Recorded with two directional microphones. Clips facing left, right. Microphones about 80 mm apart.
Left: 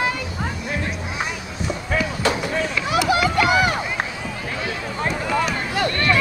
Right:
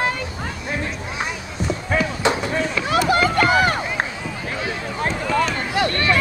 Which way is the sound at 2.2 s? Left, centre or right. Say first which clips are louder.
Right 2 dB; right.